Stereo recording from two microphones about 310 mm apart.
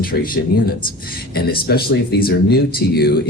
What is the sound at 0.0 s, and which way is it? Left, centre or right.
Speech, left.